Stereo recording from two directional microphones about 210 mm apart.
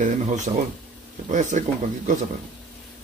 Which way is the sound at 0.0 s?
35° right (ahead or behind).